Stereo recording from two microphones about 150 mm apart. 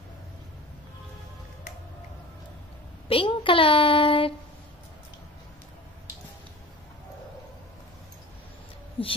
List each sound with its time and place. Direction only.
3.1 s speech: 35° left (ahead or behind)
9.0 s speech: 35° left (ahead or behind)